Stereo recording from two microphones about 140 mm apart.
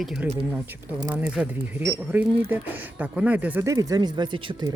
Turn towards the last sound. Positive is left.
turn(degrees=-35)  # may be behind; listen again after turning